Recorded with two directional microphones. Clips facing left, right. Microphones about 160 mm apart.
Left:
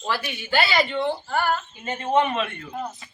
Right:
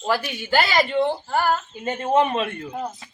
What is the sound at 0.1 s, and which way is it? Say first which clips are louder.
A man's voice: right 4 dB; 45° right (ahead or behind).